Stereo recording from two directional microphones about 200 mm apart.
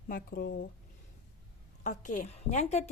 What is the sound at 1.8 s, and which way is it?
A woman's voice, 40° left (ahead or behind).